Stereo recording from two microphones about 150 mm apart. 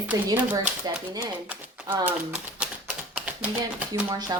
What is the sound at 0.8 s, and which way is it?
Speech, 25° right (ahead or behind).